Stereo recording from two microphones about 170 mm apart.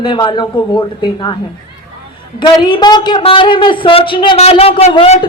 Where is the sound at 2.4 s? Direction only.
25° left (ahead or behind).